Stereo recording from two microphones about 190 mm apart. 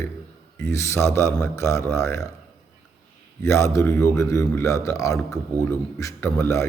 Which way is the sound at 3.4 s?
15° left (ahead or behind).